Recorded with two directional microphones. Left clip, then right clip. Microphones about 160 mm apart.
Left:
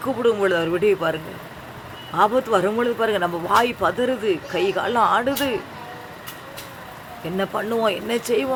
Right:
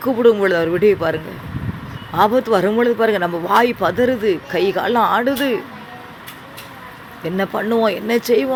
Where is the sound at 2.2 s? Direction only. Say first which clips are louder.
Right 3 dB; 20° right (ahead or behind).